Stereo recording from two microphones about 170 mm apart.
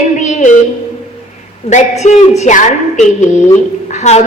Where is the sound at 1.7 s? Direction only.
45° left (ahead or behind).